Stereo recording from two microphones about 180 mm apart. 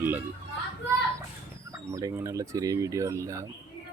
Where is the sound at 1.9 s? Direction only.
20° right (ahead or behind).